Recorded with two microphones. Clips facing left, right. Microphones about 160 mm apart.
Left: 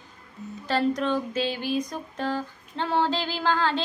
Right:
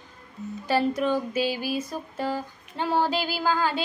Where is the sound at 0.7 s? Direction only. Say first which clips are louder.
Right 1 dB; 10° right (ahead or behind).